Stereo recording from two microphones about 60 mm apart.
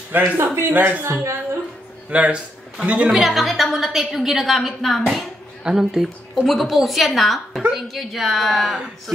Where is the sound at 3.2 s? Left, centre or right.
Centre.